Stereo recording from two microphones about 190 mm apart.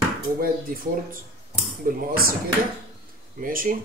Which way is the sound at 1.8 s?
50° right (ahead or behind).